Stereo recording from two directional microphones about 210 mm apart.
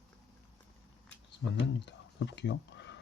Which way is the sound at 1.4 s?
60° left (ahead or behind).